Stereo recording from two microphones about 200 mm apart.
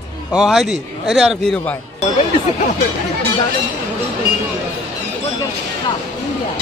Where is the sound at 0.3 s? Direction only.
Centre (ahead or behind).